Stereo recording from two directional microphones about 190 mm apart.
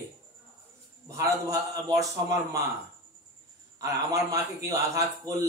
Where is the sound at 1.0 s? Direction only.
15° right (ahead or behind).